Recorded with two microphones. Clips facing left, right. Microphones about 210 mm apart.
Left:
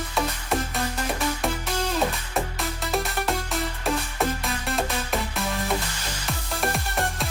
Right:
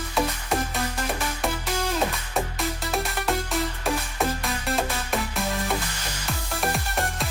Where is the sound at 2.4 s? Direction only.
Centre (ahead or behind).